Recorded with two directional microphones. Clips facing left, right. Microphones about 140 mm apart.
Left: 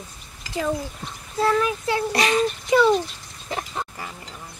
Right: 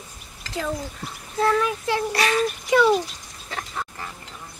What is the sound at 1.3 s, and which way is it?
Speech, 5° left (ahead or behind).